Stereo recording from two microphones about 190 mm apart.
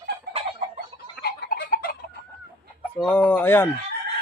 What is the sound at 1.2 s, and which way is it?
Tick-tock, 60° left (ahead or behind).